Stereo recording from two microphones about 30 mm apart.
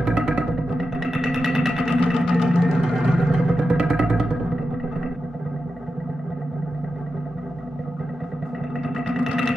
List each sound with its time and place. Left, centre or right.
0.0 s music: centre
8.8 s music: centre